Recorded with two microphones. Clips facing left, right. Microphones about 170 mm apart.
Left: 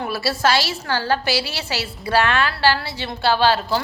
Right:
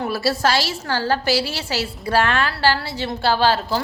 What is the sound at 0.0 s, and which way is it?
A woman's voice, 45° right (ahead or behind).